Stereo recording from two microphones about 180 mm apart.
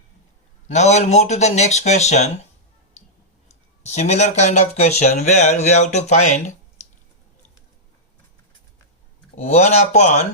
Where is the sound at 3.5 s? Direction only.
40° left (ahead or behind).